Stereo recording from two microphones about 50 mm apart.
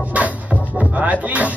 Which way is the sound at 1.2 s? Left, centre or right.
Right.